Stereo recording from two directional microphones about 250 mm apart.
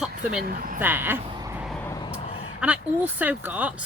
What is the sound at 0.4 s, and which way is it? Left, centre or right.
Speech, right.